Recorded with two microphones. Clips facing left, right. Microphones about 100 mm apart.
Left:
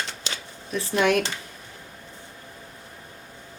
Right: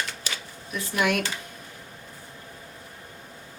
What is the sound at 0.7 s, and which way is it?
Speech, 30° left (ahead or behind).